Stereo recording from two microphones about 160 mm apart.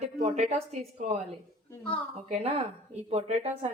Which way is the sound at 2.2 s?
40° right (ahead or behind).